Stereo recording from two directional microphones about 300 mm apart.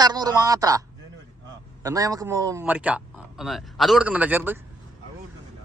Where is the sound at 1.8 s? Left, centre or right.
Centre.